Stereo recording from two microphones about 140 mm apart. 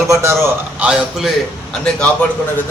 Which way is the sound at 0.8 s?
5° right (ahead or behind).